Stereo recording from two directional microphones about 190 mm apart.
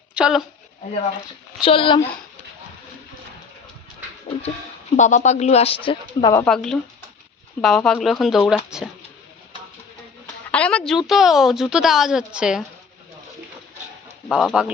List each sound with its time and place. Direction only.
0.1 s a sound: 5° right (ahead or behind)
1.6 s speech: 25° left (ahead or behind)
4.9 s speech: 40° left (ahead or behind)
6.3 s a woman's voice: 5° left (ahead or behind)
10.5 s a woman's voice: 5° left (ahead or behind)
14.3 s a woman's voice: centre (ahead or behind)